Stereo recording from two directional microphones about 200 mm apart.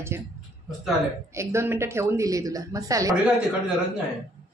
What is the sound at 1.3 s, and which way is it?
A woman's voice, 15° right (ahead or behind).